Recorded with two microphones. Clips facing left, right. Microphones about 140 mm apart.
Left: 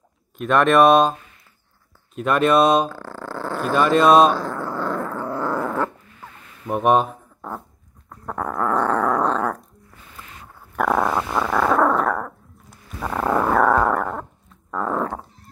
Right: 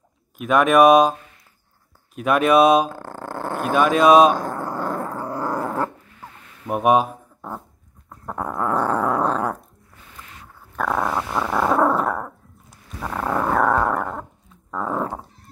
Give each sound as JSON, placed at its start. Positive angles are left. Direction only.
{"t": 0.4, "sound": "speech", "side_deg": -5}
{"t": 2.1, "sound": "speech", "side_deg": -5}
{"t": 2.9, "sound": "dog", "side_deg": -50}
{"t": 3.7, "sound": "speech", "side_deg": -5}
{"t": 4.3, "sound": "growling", "side_deg": -45}
{"t": 6.6, "sound": "speech", "side_deg": -5}
{"t": 8.4, "sound": "dog", "side_deg": -15}
{"t": 8.7, "sound": "growling", "side_deg": -5}
{"t": 10.8, "sound": "dog", "side_deg": 5}
{"t": 11.3, "sound": "dog", "side_deg": -10}